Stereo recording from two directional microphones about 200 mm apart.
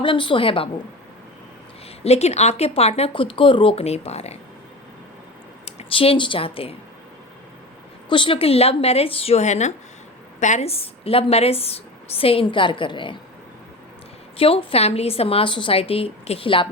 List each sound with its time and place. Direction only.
0.0 s a woman's voice: 25° left (ahead or behind)
2.0 s speech: 35° left (ahead or behind)
5.6 s a woman's voice: 30° left (ahead or behind)
8.1 s a woman's voice: 25° left (ahead or behind)
14.3 s a woman's voice: 30° left (ahead or behind)